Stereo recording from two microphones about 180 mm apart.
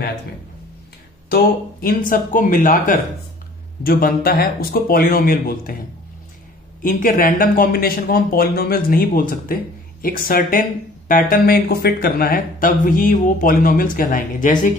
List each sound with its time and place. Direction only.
1.3 s speech: 55° left (ahead or behind)
6.8 s speech: 50° left (ahead or behind)